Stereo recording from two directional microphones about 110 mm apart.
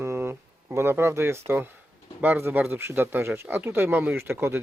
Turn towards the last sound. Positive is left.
turn(degrees=-20)  # may be behind; listen again after turning